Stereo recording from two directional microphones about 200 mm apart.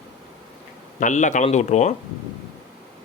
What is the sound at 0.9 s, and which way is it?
Speech, 40° left (ahead or behind).